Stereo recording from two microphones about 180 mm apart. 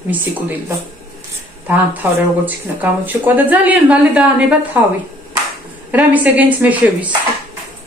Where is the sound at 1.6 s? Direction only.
10° right (ahead or behind).